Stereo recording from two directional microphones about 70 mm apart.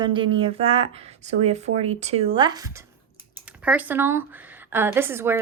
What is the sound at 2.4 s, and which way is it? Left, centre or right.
Speech, right.